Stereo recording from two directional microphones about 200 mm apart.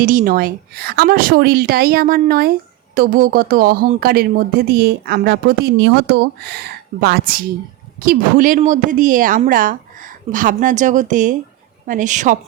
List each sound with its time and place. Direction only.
0.0 s a woman's voice: 45° right (ahead or behind)